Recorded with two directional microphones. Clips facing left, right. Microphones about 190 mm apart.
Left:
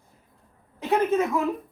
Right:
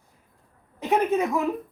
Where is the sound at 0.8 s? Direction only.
15° right (ahead or behind).